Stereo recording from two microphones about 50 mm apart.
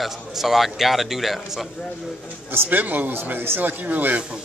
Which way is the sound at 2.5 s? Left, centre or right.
Right.